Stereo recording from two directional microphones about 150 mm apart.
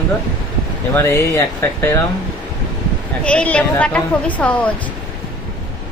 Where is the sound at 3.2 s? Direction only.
10° left (ahead or behind).